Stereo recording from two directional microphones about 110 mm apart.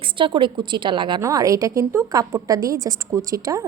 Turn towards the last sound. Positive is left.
turn(degrees=-30)  # may be behind; listen again after turning